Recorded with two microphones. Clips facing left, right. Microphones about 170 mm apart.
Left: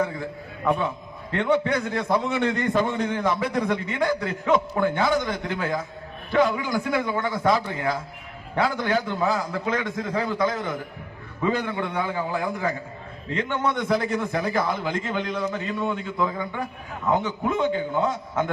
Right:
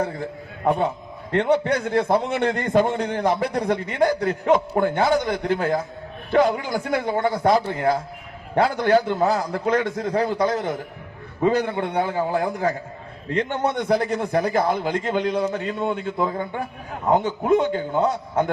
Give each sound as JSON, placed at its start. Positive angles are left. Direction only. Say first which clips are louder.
{"t": 0.0, "sound": "a man's voice", "louder": "right 1 dB", "side_deg": -50}